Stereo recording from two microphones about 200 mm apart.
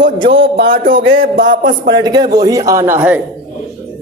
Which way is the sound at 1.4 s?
65° right (ahead or behind).